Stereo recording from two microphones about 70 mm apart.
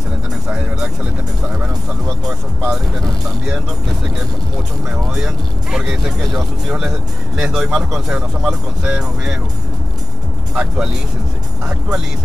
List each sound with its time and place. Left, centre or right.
0.5 s music: centre
2.2 s speech: centre
5.1 s speech: centre
10.5 s speech: centre